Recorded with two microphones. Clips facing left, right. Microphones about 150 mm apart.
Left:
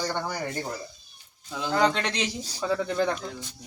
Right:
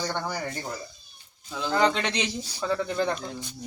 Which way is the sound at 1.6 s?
5° left (ahead or behind).